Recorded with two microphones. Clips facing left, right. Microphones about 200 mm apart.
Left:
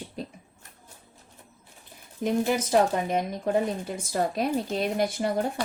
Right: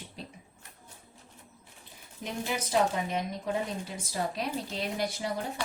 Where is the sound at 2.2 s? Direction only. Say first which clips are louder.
Left 9 dB; 50° left (ahead or behind).